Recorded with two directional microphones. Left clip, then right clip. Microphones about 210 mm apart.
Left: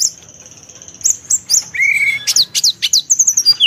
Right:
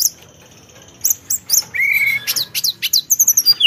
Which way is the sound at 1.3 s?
5° right (ahead or behind).